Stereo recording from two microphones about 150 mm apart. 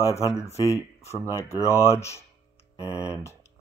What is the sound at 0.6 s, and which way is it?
Speech, 20° left (ahead or behind).